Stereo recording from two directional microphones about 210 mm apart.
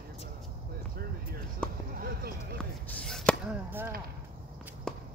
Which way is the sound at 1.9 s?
45° right (ahead or behind).